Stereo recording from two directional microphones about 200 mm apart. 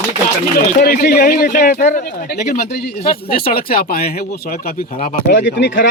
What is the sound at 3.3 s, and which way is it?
Speech, 50° left (ahead or behind).